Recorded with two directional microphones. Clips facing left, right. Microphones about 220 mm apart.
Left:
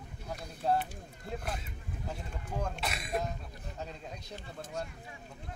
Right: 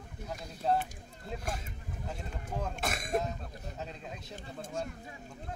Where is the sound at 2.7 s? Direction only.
45° right (ahead or behind).